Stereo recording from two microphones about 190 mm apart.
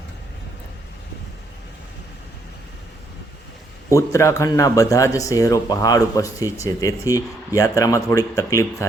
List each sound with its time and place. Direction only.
3.8 s speech: 15° left (ahead or behind)